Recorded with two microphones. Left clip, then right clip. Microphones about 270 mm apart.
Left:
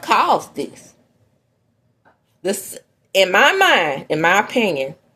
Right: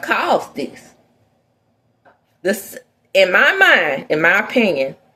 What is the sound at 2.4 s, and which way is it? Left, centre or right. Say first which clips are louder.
Speech: right 3 dB; left.